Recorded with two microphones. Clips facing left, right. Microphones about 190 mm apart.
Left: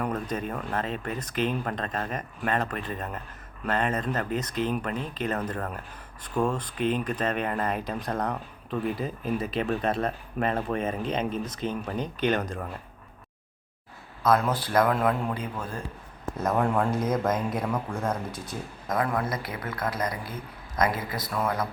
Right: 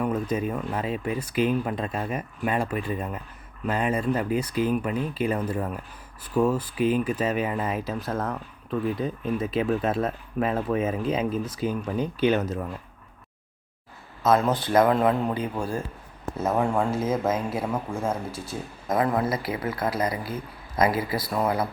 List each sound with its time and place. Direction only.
0.0 s speech: 10° right (ahead or behind)
14.2 s speech: 25° right (ahead or behind)
16.4 s speech: 5° right (ahead or behind)
18.3 s speech: 30° right (ahead or behind)
19.3 s speech: 5° right (ahead or behind)
19.7 s speech: 25° right (ahead or behind)
20.8 s speech: 10° right (ahead or behind)
21.2 s speech: 30° right (ahead or behind)